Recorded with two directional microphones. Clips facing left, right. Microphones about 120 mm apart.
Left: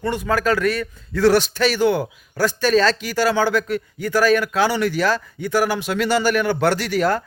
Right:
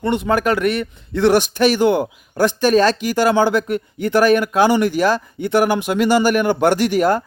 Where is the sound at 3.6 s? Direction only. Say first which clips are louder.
Right 3 dB; 50° right (ahead or behind).